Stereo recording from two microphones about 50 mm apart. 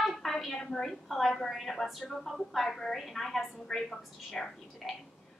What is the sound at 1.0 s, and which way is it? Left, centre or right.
A woman's voice, centre.